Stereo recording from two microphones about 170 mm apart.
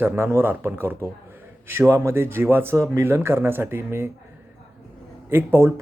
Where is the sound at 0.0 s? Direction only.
10° right (ahead or behind).